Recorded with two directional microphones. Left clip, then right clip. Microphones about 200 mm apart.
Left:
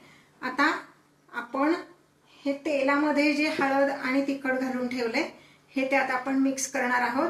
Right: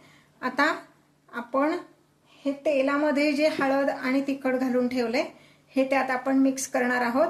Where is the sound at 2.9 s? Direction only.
60° right (ahead or behind).